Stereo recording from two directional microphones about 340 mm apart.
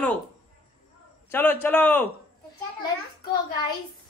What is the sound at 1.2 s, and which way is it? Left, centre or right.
Speech, centre.